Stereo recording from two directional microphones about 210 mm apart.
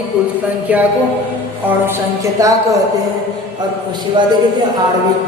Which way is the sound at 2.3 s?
15° right (ahead or behind).